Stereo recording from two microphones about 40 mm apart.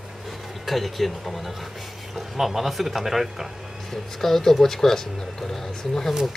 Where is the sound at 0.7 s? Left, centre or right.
Centre.